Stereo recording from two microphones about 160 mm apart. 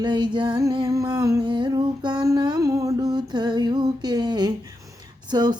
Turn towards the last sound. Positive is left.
turn(degrees=-25)  # may be behind; listen again after turning